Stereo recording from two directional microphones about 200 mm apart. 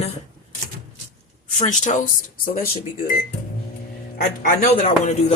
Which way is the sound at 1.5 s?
35° left (ahead or behind).